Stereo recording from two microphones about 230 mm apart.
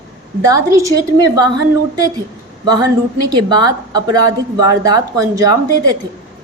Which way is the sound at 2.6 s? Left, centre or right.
Centre.